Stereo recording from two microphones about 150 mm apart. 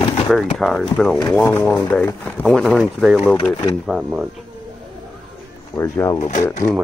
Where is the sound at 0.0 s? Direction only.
35° left (ahead or behind).